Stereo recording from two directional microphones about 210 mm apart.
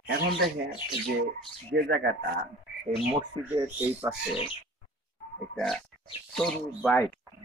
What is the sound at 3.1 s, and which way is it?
Speech, 15° right (ahead or behind).